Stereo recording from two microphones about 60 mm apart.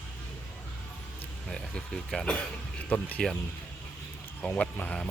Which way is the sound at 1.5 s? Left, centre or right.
Centre.